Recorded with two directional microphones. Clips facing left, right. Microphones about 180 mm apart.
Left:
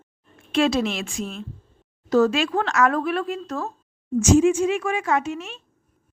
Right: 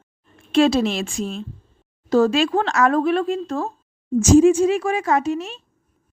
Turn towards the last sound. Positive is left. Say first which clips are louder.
# right 4 dB
turn(degrees=-35)  # may be behind; listen again after turning